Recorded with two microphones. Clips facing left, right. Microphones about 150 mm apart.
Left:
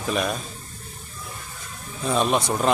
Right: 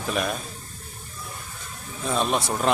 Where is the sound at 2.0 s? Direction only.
Centre (ahead or behind).